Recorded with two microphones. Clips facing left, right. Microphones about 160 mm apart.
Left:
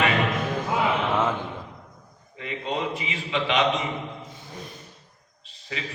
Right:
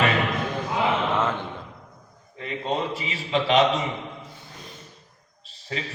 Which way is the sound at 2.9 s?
35° right (ahead or behind).